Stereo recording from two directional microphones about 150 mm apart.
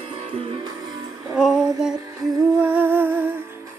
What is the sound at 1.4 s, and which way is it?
Female singing, centre (ahead or behind).